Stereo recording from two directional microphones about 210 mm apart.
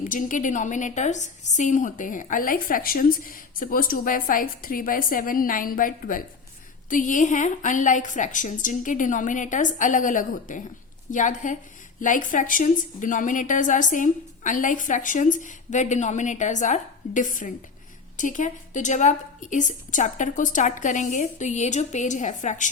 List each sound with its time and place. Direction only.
0.0 s a woman's voice: 40° left (ahead or behind)